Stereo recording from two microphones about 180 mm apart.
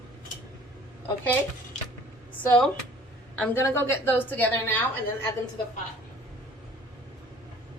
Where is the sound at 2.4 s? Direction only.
5° left (ahead or behind).